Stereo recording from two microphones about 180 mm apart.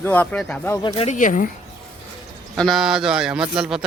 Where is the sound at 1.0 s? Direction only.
45° left (ahead or behind).